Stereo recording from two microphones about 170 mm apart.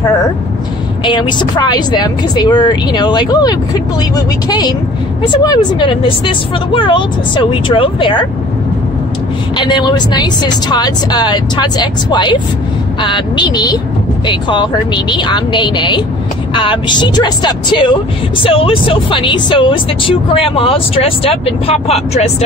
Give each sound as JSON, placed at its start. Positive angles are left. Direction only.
{"t": 1.0, "sound": "speech", "side_deg": 30}
{"t": 9.6, "sound": "speech", "side_deg": 25}